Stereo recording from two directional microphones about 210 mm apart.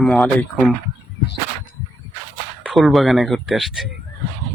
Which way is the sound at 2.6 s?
Centre (ahead or behind).